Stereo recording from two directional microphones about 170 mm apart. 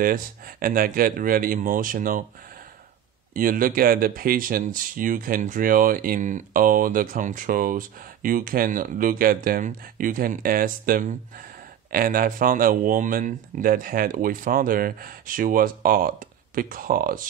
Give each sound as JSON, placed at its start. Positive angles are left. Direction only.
{"t": 0.0, "sound": "speech", "side_deg": -55}
{"t": 3.3, "sound": "speech", "side_deg": -55}